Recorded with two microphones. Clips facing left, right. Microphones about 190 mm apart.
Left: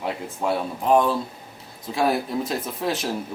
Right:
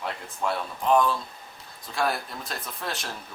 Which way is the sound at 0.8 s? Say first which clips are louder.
Left 3 dB; 30° left (ahead or behind).